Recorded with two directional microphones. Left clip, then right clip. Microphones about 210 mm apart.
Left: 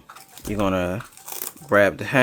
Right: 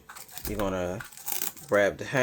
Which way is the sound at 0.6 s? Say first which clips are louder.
Left 7 dB; 40° left (ahead or behind).